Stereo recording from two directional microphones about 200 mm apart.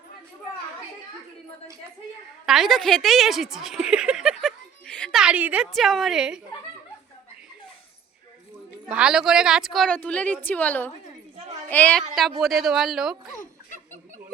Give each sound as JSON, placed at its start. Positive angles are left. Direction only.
{"t": 2.5, "sound": "a woman's voice", "side_deg": 0}
{"t": 8.9, "sound": "a woman's voice", "side_deg": -5}
{"t": 13.3, "sound": "a sound", "side_deg": 40}